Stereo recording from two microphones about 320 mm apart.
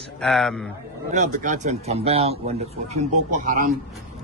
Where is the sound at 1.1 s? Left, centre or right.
Right.